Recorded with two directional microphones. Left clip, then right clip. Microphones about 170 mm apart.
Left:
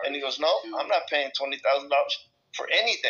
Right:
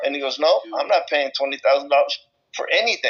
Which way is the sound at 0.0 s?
35° right (ahead or behind).